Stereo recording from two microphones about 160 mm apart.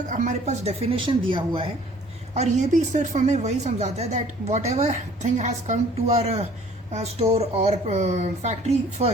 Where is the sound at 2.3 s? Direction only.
50° right (ahead or behind).